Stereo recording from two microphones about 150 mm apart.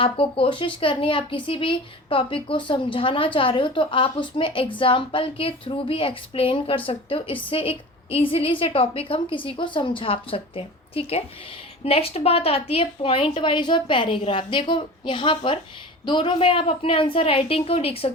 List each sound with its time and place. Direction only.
0.0 s a woman's voice: 40° left (ahead or behind)